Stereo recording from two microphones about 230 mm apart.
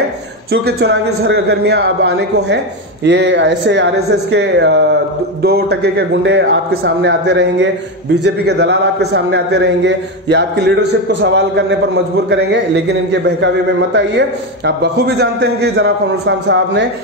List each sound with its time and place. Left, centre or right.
0.5 s a man's voice: right